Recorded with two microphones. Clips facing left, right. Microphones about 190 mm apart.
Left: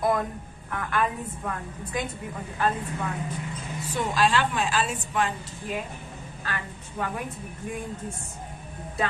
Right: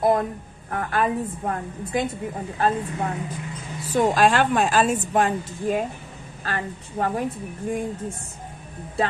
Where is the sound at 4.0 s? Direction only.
50° right (ahead or behind).